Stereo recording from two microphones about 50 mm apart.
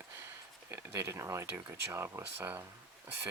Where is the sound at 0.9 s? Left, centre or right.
Right.